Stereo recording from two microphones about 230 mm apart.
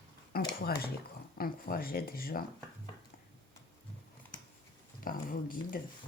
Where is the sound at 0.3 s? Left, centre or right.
Left.